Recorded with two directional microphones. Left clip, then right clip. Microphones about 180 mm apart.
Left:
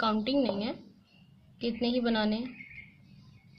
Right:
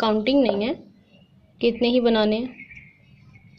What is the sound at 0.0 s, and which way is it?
A woman's voice, 20° right (ahead or behind).